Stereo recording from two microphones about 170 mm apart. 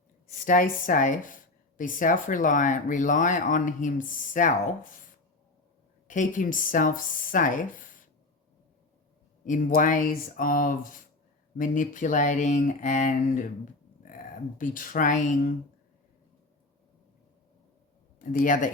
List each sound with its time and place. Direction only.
0.4 s speech: 55° left (ahead or behind)
6.1 s speech: 50° left (ahead or behind)
9.5 s speech: 50° left (ahead or behind)
14.6 s speech: 50° left (ahead or behind)
18.2 s speech: 50° left (ahead or behind)